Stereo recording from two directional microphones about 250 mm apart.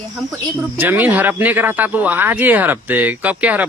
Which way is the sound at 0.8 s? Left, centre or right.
Centre.